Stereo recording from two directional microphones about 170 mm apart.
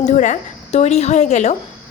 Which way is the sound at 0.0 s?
45° left (ahead or behind).